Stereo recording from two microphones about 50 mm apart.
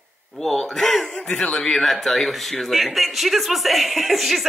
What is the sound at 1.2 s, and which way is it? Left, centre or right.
Speech, left.